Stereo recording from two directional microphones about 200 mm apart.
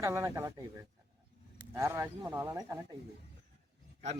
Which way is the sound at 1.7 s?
15° right (ahead or behind).